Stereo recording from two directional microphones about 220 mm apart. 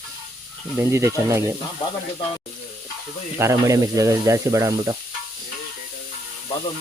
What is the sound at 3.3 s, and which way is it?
Speech, 15° right (ahead or behind).